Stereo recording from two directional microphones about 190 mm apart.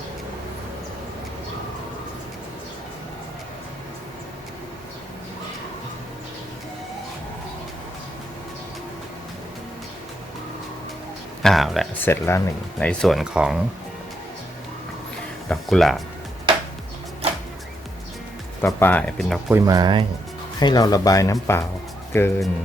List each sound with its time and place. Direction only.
11.4 s speech: centre (ahead or behind)
12.0 s speech: 15° left (ahead or behind); by 13.6 s 5° right (ahead or behind)
15.4 s speech: centre (ahead or behind)
18.6 s speech: 10° left (ahead or behind)
19.5 s speech: 20° right (ahead or behind)
20.6 s speech: 20° left (ahead or behind)